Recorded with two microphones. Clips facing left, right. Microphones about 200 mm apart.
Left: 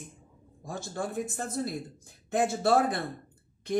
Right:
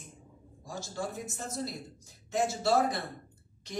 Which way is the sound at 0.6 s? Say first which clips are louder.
Left 3 dB; 55° left (ahead or behind).